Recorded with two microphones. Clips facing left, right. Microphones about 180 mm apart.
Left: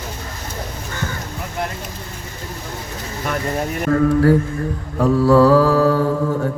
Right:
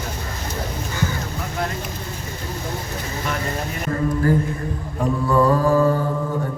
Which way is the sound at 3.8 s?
70° left (ahead or behind).